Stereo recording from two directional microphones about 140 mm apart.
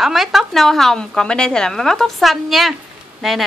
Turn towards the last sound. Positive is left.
turn(degrees=0)  # may be behind; listen again after turning